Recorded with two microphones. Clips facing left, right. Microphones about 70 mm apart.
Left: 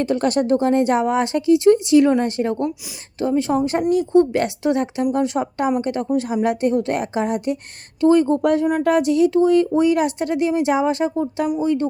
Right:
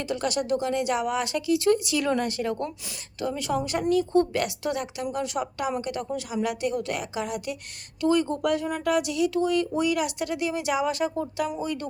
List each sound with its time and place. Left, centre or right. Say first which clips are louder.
0.0 s a woman's voice: left 9 dB; left